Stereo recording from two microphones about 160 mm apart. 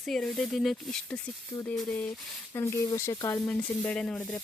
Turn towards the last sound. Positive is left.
turn(degrees=5)  # may be behind; listen again after turning